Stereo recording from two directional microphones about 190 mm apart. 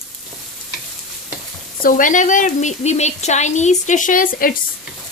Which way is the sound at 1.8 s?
45° left (ahead or behind).